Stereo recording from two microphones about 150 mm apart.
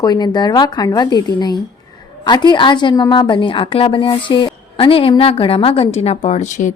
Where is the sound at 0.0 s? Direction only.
25° left (ahead or behind).